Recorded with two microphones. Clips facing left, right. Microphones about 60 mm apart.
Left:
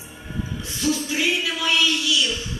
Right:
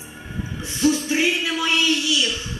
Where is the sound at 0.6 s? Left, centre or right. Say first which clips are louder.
Right 5 dB; right.